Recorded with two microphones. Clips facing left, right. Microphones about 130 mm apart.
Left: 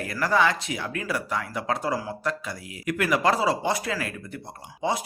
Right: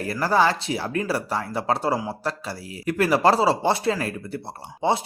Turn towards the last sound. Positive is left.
turn(degrees=-30)  # may be behind; listen again after turning